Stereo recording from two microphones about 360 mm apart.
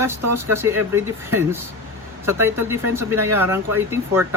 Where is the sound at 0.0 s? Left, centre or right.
Centre.